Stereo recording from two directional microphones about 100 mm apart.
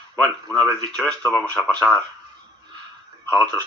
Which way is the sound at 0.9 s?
10° left (ahead or behind).